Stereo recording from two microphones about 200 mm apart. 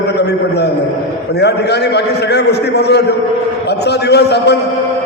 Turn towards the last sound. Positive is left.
turn(degrees=55)  # may be behind; listen again after turning